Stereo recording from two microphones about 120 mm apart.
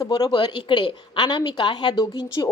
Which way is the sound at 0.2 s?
40° left (ahead or behind).